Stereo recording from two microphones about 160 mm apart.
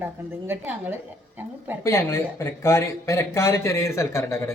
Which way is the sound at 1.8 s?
20° left (ahead or behind).